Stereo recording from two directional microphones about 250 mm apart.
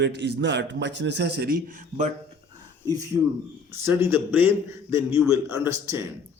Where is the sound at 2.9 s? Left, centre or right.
Centre.